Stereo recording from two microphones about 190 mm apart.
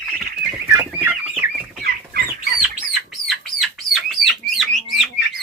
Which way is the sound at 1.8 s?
55° right (ahead or behind).